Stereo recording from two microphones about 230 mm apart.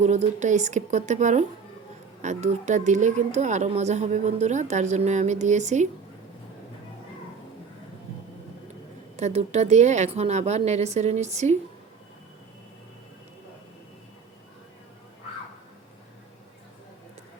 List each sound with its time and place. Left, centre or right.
0.0 s speech: right
9.1 s a woman's voice: right